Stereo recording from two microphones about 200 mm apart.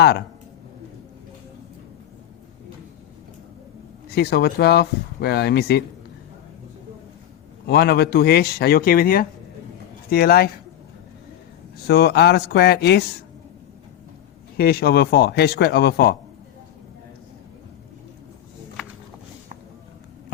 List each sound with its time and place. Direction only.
4.1 s speech: 50° left (ahead or behind)
7.7 s speech: 55° left (ahead or behind)
11.9 s speech: 50° left (ahead or behind)
14.6 s speech: 50° left (ahead or behind)